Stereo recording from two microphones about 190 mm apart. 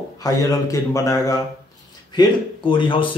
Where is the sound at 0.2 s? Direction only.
15° left (ahead or behind).